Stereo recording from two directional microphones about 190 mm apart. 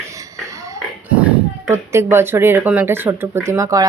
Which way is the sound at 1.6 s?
15° right (ahead or behind).